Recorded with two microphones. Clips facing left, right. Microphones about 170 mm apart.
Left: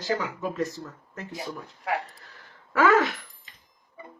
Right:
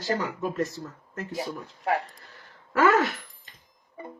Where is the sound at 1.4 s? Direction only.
35° right (ahead or behind).